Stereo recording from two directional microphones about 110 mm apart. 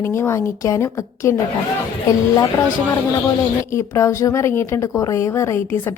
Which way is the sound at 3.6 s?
25° left (ahead or behind).